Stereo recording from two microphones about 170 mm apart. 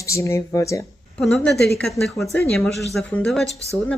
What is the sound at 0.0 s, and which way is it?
Speech, 15° left (ahead or behind).